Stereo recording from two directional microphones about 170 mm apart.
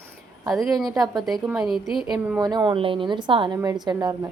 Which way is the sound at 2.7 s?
30° right (ahead or behind).